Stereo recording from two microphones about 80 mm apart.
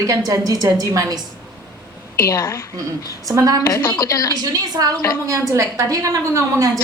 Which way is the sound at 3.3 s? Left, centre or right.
Right.